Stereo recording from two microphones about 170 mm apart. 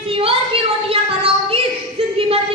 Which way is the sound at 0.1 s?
35° right (ahead or behind).